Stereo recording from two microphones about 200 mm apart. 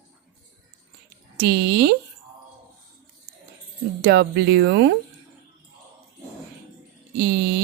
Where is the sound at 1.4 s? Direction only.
55° right (ahead or behind).